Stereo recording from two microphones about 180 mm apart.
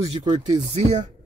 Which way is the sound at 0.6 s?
40° right (ahead or behind).